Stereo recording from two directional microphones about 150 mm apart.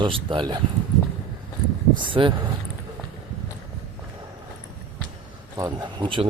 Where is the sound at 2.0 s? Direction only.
35° right (ahead or behind).